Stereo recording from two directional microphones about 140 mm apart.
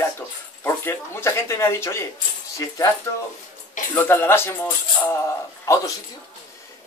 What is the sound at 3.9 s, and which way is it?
Speech, 15° left (ahead or behind).